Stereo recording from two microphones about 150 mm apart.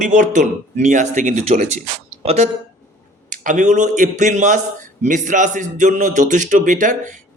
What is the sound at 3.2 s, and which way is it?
A man's voice, 60° right (ahead or behind).